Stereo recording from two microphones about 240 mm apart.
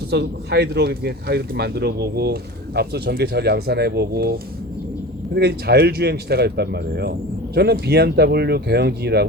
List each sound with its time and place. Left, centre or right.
0.1 s speech: right